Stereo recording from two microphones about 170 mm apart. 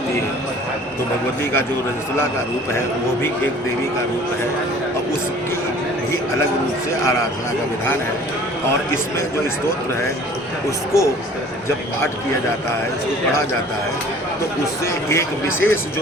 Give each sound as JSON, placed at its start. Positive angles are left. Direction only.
{"t": 10.9, "sound": "speech", "side_deg": 15}
{"t": 14.8, "sound": "speech", "side_deg": 15}